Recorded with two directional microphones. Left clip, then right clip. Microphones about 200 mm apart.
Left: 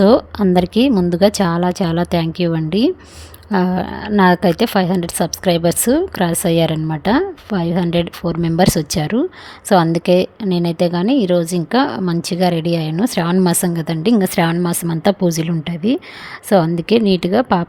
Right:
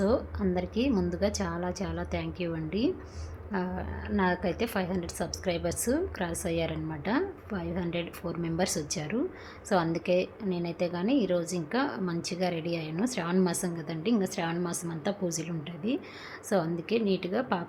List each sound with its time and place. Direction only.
0.0 s a woman's voice: 45° left (ahead or behind)